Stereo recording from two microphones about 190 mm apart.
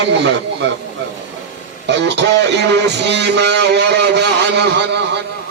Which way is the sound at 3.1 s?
65° right (ahead or behind).